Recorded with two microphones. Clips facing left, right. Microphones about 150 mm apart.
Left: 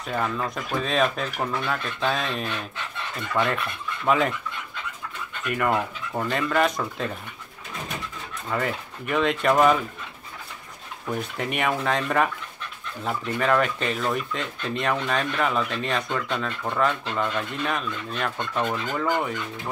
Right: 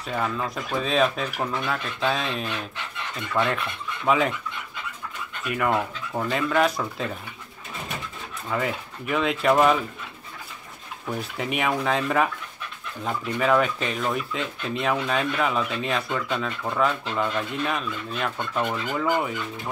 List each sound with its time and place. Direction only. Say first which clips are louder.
0.0 s speech: even; centre (ahead or behind)
5.4 s speech: even; centre (ahead or behind)
8.5 s speech: even; centre (ahead or behind)
11.3 s speech: right 1 dB; centre (ahead or behind)